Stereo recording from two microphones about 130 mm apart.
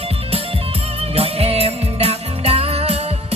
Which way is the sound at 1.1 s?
50° right (ahead or behind).